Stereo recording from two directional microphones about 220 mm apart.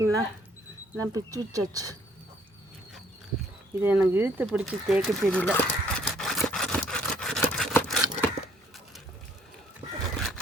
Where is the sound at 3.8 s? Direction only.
10° right (ahead or behind); by 5.6 s 5° left (ahead or behind).